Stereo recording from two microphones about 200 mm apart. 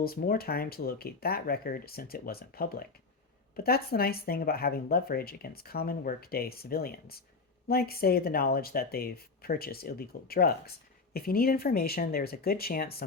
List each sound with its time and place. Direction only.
0.0 s speech: 50° left (ahead or behind)